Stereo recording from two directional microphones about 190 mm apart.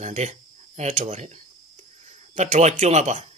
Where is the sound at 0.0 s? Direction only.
35° right (ahead or behind).